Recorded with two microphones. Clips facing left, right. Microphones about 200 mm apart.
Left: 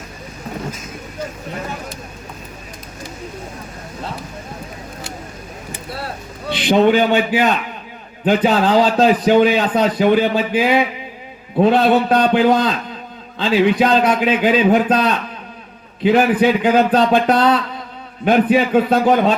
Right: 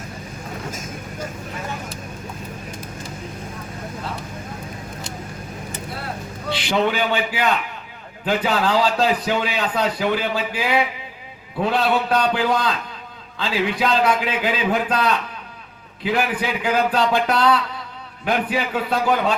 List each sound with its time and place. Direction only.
6.5 s a man's voice: 20° left (ahead or behind)